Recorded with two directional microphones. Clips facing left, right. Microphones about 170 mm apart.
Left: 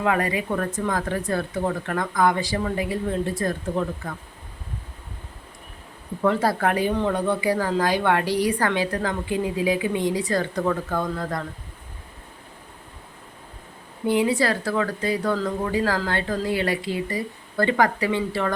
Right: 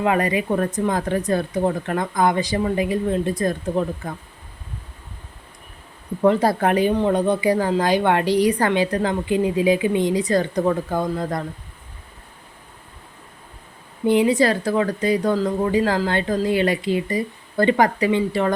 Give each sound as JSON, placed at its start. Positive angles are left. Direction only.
{"t": 0.0, "sound": "speech", "side_deg": -20}
{"t": 6.2, "sound": "speech", "side_deg": -20}
{"t": 14.1, "sound": "speech", "side_deg": -20}